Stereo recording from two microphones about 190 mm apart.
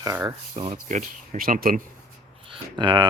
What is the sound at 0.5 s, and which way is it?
Speech, 35° right (ahead or behind).